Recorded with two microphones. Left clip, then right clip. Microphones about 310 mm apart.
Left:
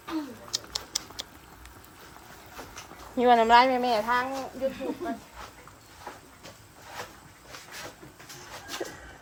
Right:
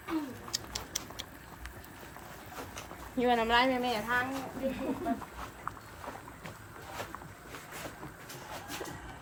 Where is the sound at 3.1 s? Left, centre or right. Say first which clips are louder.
Left 9 dB; centre.